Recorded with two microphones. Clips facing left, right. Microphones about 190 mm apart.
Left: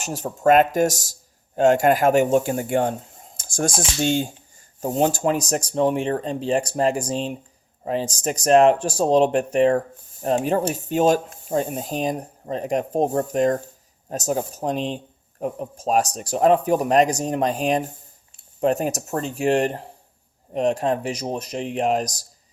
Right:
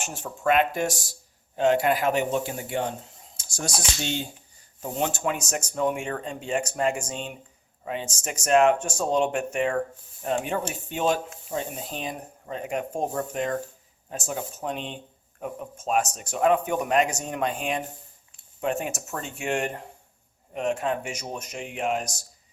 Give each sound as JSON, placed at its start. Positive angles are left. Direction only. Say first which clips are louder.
{"t": 0.0, "sound": "speech", "louder": "left 7 dB", "side_deg": 40}
{"t": 4.8, "sound": "speech", "louder": "left 7 dB", "side_deg": 35}